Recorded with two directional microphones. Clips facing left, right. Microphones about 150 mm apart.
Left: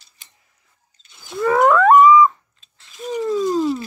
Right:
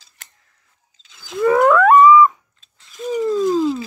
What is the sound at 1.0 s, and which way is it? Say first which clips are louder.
Wild animals: right 1 dB; 90° right.